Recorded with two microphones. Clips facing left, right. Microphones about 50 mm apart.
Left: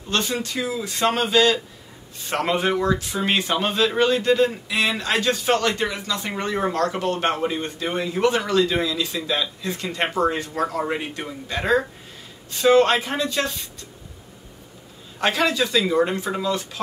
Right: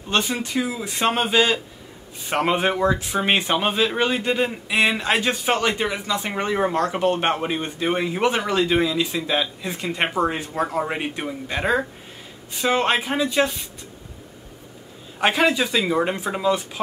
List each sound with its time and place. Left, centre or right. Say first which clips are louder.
0.1 s speech: right 2 dB; centre
15.1 s speech: right 2 dB; centre